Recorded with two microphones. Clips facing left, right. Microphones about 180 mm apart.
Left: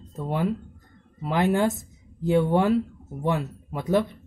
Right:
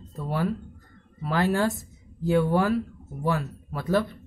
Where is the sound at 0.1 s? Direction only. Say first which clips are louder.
Left 2 dB; 20° left (ahead or behind).